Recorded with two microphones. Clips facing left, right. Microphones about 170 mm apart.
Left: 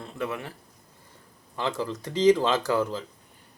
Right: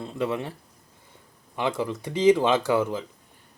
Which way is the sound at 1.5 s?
15° right (ahead or behind).